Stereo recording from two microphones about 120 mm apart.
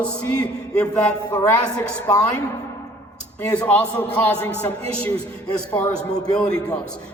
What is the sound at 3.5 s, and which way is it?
Speech, 10° left (ahead or behind).